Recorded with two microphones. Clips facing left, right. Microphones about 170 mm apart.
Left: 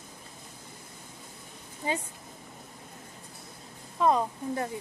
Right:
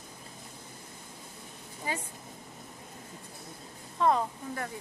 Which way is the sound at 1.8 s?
20° left (ahead or behind).